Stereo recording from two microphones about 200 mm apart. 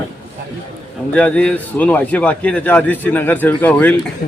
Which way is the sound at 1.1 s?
5° left (ahead or behind).